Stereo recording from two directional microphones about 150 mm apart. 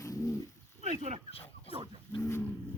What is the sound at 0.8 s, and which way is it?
Speech, 50° right (ahead or behind).